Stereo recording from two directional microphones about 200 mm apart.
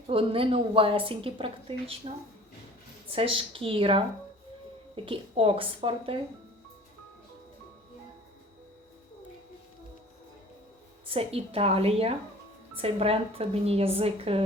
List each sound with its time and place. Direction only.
0.1 s a woman's voice: 30° right (ahead or behind)
3.1 s a woman's voice: 25° right (ahead or behind)
5.0 s a woman's voice: 25° right (ahead or behind)
11.0 s a woman's voice: 30° right (ahead or behind)